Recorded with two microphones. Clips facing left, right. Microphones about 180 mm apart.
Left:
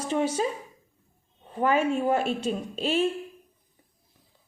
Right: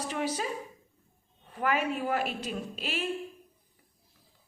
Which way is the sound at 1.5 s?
25° left (ahead or behind).